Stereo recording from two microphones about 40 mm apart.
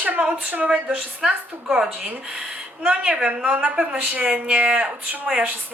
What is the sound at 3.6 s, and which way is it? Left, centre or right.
A woman's voice, right.